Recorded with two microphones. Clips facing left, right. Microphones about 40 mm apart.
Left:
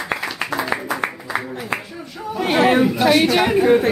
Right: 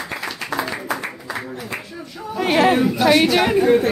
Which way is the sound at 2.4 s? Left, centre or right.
Centre.